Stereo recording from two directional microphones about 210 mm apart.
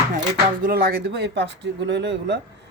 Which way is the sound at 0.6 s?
45° right (ahead or behind).